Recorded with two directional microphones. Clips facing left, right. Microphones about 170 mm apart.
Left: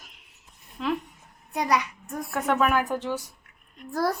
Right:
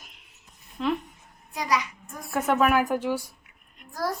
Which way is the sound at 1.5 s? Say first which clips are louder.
Left 2 dB; 60° left (ahead or behind).